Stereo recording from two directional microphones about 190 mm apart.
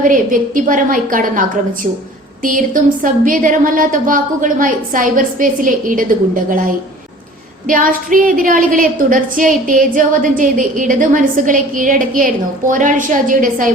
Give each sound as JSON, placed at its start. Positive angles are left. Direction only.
{"t": 0.0, "sound": "a woman's voice", "side_deg": -45}